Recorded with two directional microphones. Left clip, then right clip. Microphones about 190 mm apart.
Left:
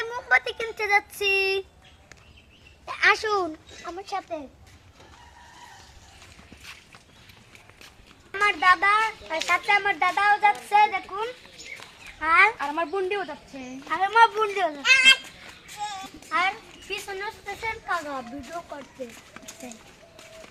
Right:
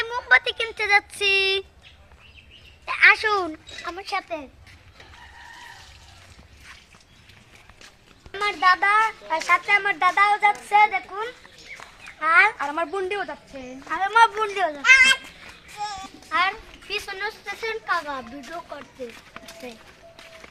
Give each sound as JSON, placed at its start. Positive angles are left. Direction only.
{"t": 0.0, "sound": "a sound", "side_deg": -5}
{"t": 0.9, "sound": "a sound", "side_deg": 10}
{"t": 1.3, "sound": "speech", "side_deg": -10}
{"t": 2.8, "sound": "speech", "side_deg": 10}
{"t": 3.8, "sound": "speech", "side_deg": 0}
{"t": 8.4, "sound": "speech", "side_deg": 5}
{"t": 10.9, "sound": "a child's voice", "side_deg": -25}
{"t": 12.2, "sound": "speech", "side_deg": -35}
{"t": 12.5, "sound": "speech", "side_deg": 0}
{"t": 14.8, "sound": "speech", "side_deg": 20}
{"t": 15.8, "sound": "child singing", "side_deg": 5}
{"t": 16.3, "sound": "a child's voice", "side_deg": -10}